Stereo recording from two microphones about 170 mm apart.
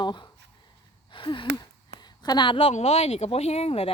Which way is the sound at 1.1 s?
30° left (ahead or behind).